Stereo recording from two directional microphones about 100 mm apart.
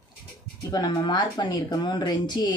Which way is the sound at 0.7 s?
45° left (ahead or behind).